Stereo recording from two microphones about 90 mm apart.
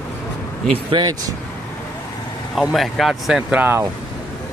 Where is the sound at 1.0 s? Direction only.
45° right (ahead or behind).